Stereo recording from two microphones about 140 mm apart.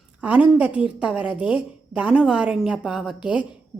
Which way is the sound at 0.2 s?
10° right (ahead or behind).